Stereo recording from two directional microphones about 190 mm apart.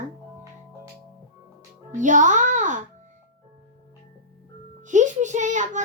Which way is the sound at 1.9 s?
40° right (ahead or behind).